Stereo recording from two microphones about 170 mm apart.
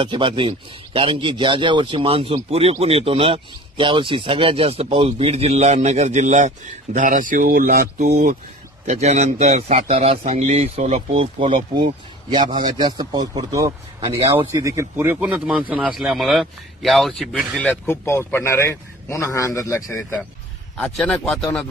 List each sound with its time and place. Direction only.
0.0 s a man's voice: 30° right (ahead or behind); by 8.4 s 55° right (ahead or behind)
8.8 s a man's voice: 40° right (ahead or behind); by 21.5 s 5° left (ahead or behind)